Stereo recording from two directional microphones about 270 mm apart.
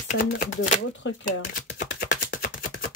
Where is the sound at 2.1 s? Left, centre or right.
Left.